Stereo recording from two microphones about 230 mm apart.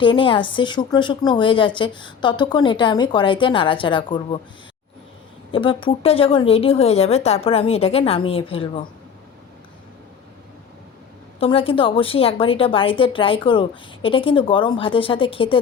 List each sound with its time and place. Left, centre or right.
0.0 s a woman's voice: left
5.5 s a woman's voice: left
11.3 s a woman's voice: left